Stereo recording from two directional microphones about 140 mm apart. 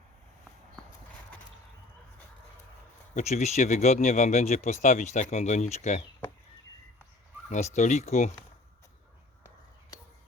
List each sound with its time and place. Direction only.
3.2 s speech: 55° left (ahead or behind)
7.5 s speech: 60° left (ahead or behind)